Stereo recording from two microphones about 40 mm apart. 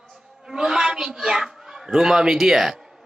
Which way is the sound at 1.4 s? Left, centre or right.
Centre.